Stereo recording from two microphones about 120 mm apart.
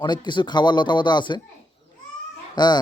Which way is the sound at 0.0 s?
40° left (ahead or behind).